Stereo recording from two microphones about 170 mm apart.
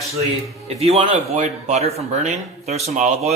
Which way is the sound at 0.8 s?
35° right (ahead or behind).